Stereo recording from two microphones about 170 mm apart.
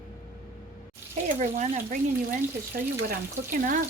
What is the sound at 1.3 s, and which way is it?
Speech, 45° right (ahead or behind).